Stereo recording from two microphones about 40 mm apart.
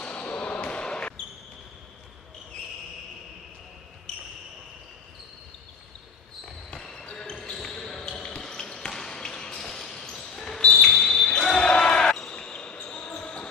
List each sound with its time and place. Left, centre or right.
0.0 s basketball bounce: left
6.7 s basketball bounce: centre